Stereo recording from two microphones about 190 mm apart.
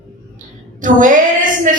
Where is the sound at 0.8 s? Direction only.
45° right (ahead or behind).